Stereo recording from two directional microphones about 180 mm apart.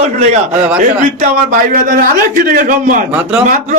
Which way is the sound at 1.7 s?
50° right (ahead or behind).